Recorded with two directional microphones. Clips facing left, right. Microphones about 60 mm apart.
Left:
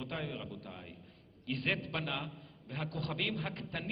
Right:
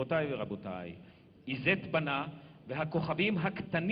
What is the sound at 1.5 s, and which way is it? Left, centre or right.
A man's voice, right.